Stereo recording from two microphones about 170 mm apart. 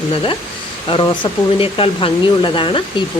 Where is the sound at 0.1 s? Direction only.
30° left (ahead or behind).